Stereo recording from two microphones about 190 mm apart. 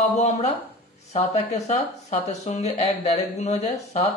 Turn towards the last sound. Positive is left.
turn(degrees=35)  # may be behind; listen again after turning